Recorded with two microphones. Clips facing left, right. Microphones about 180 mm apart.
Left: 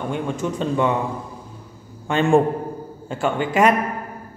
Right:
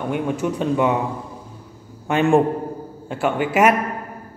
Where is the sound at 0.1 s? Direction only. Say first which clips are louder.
Right 4 dB; 10° right (ahead or behind).